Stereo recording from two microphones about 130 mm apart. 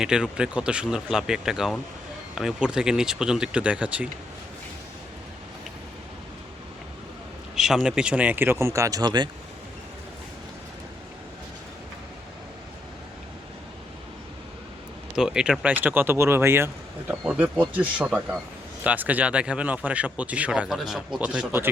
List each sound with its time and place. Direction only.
0.0 s speech: 5° right (ahead or behind)
7.5 s speech: 5° right (ahead or behind); by 9.3 s 35° right (ahead or behind)
15.1 s speech: 5° right (ahead or behind)